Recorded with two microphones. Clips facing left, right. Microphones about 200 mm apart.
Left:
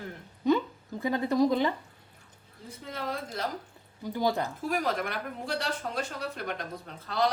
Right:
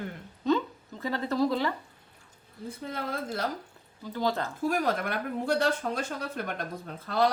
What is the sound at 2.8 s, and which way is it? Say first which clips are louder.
Speech: right 1 dB; 50° right (ahead or behind).